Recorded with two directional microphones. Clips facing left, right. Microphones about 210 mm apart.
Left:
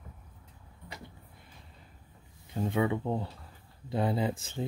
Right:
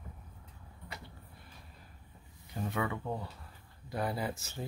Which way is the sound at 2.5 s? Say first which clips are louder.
Left 6 dB; 25° left (ahead or behind).